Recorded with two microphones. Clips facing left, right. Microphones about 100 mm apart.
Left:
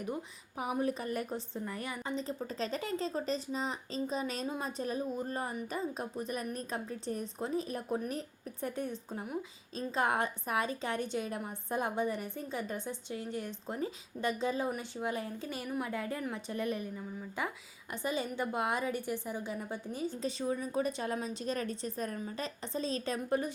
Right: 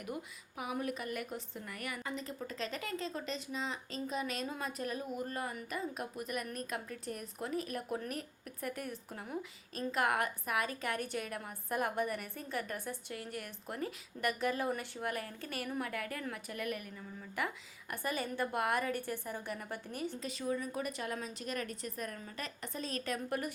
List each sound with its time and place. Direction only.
0.0 s a woman's voice: 30° left (ahead or behind)
20.2 s a woman's voice: 25° left (ahead or behind)